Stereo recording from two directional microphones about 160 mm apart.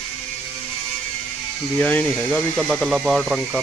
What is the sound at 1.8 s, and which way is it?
Speech, 10° left (ahead or behind).